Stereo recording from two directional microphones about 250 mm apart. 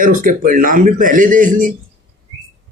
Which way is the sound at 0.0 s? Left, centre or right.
Right.